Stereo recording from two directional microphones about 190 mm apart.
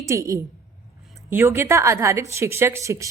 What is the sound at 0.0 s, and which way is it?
A woman's voice, 15° right (ahead or behind).